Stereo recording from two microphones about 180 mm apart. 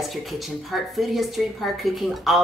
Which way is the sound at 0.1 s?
Centre (ahead or behind).